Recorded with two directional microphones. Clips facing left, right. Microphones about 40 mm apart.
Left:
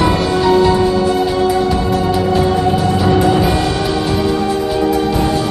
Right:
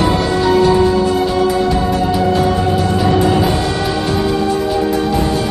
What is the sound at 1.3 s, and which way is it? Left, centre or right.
Music, centre.